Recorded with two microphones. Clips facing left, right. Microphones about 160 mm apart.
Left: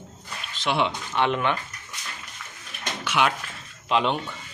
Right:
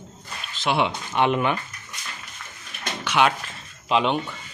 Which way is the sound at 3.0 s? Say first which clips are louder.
Right 3 dB; centre (ahead or behind).